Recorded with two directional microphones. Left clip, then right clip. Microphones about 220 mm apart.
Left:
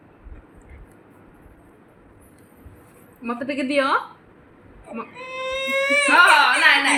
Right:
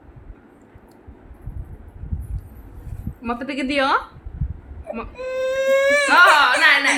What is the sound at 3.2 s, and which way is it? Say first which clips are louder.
Speech: right 1 dB; 25° right (ahead or behind).